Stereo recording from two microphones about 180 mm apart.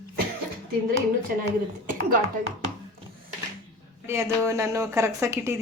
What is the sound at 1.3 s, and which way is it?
Speech, 50° right (ahead or behind).